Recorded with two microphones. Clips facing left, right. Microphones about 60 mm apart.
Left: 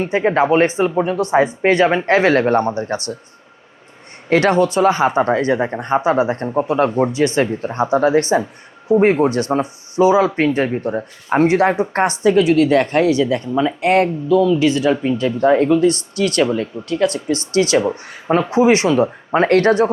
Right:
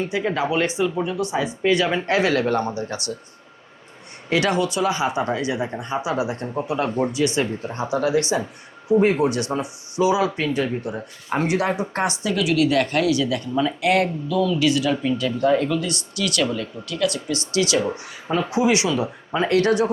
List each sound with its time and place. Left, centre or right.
0.0 s speech: left
4.3 s speech: left